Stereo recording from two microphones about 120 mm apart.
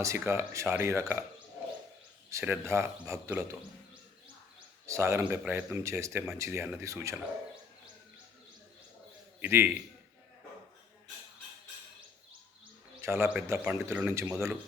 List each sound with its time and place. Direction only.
0.0 s speech: 25° right (ahead or behind)
2.4 s speech: 20° right (ahead or behind)
4.9 s speech: 25° right (ahead or behind)
9.4 s a man's voice: 15° right (ahead or behind)
13.0 s a man's voice: 20° right (ahead or behind)